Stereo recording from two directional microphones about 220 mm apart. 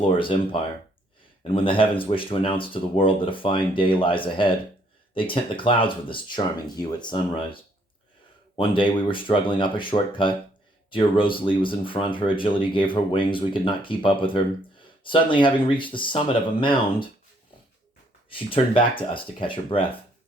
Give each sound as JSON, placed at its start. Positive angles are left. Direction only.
{"t": 0.0, "sound": "speech", "side_deg": 25}
{"t": 18.3, "sound": "speech", "side_deg": 25}